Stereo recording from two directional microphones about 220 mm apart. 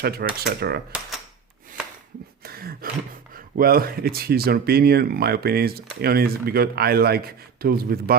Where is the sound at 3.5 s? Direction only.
40° right (ahead or behind).